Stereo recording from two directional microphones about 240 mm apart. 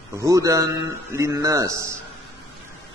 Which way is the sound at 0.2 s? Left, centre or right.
Centre.